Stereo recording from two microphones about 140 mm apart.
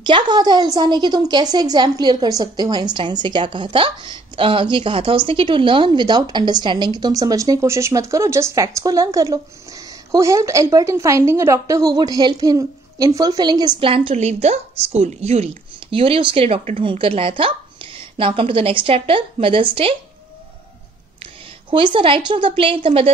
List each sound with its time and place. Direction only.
0.0 s a woman's voice: 30° right (ahead or behind)
13.7 s a woman's voice: 40° right (ahead or behind)
21.6 s a woman's voice: 35° right (ahead or behind)